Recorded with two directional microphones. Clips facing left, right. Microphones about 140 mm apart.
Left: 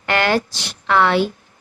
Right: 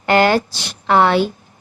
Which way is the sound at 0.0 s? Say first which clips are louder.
Right 4 dB; 30° right (ahead or behind).